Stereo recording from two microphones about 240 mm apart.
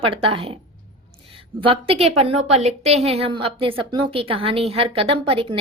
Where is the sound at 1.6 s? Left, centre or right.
Right.